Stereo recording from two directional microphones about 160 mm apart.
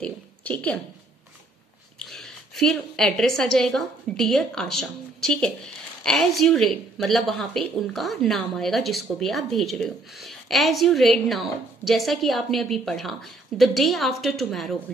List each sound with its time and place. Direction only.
0.0 s a woman's voice: 10° left (ahead or behind)
2.0 s a woman's voice: centre (ahead or behind)